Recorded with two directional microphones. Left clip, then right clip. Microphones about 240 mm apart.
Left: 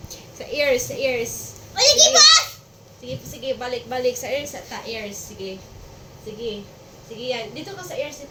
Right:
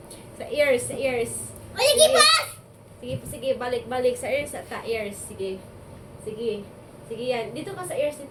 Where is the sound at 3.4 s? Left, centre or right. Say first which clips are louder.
Right 1 dB; centre.